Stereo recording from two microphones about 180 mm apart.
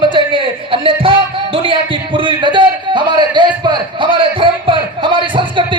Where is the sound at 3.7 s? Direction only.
25° right (ahead or behind).